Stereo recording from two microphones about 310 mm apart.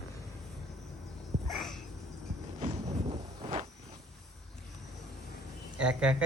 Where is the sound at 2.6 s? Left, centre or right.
Centre.